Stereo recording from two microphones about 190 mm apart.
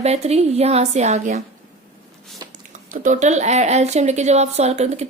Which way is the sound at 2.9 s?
40° right (ahead or behind).